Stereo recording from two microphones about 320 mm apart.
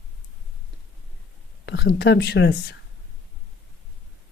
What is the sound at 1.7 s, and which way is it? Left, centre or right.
Speech, left.